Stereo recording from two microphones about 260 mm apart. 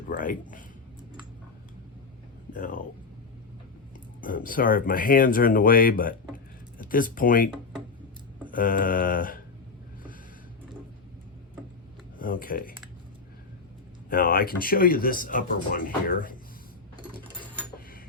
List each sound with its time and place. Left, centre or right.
0.1 s speech: left
2.5 s speech: left
4.2 s speech: left
8.5 s speech: left
12.2 s speech: left
14.1 s speech: left